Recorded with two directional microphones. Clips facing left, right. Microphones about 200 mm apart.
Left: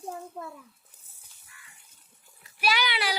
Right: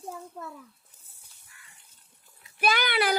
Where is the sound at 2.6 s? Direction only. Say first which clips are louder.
Right 3 dB; 50° right (ahead or behind).